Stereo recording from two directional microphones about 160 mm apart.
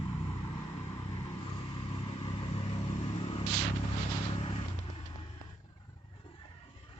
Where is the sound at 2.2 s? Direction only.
30° left (ahead or behind).